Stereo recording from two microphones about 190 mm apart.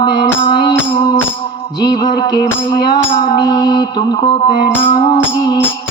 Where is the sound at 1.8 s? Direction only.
20° left (ahead or behind).